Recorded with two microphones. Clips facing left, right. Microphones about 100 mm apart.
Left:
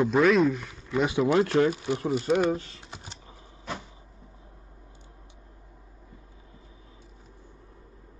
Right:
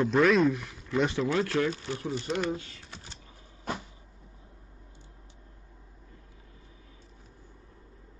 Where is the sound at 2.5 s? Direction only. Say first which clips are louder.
Left 5 dB; 30° left (ahead or behind).